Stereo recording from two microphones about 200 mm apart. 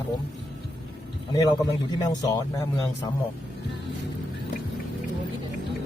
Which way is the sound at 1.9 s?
20° left (ahead or behind).